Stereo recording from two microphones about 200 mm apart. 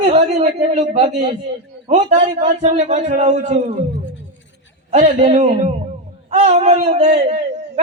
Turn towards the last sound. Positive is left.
turn(degrees=-35)  # may be behind; listen again after turning